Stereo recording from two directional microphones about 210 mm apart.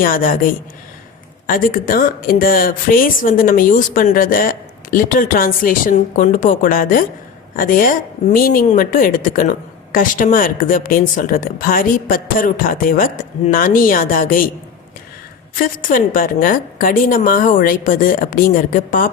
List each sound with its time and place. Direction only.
0.0 s a woman's voice: 40° left (ahead or behind)
15.5 s a woman's voice: 40° left (ahead or behind)